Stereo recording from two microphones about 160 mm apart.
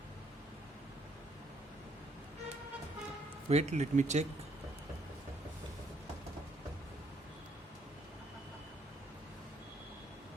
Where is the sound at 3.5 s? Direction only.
45° right (ahead or behind).